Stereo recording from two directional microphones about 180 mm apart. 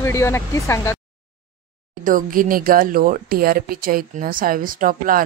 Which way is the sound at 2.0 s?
50° right (ahead or behind).